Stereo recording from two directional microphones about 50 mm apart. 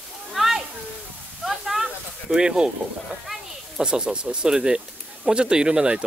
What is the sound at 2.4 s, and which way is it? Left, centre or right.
Speech, centre.